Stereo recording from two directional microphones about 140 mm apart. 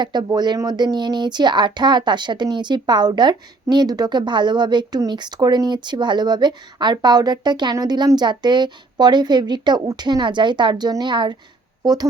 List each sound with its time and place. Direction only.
0.0 s speech: 30° right (ahead or behind)